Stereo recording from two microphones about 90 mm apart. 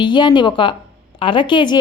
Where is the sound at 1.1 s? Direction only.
75° left (ahead or behind).